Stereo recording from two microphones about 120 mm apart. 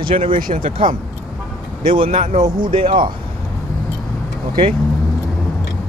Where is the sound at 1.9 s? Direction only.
50° right (ahead or behind).